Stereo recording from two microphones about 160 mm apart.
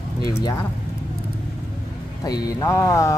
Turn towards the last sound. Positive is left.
turn(degrees=20)  # may be behind; listen again after turning